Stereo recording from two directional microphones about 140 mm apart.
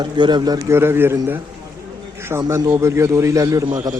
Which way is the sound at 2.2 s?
15° right (ahead or behind).